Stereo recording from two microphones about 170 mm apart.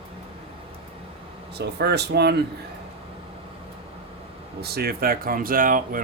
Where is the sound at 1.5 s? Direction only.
75° right (ahead or behind).